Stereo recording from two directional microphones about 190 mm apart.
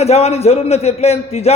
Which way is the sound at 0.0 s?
35° left (ahead or behind).